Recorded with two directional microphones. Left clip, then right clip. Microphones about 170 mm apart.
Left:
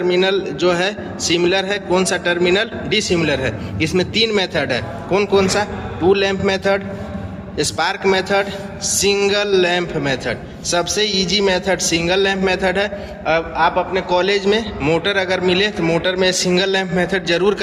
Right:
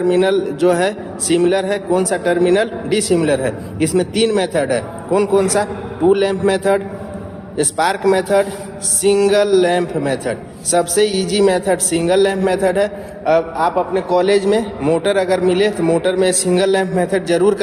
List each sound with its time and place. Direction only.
0.0 s a man's voice: 40° right (ahead or behind)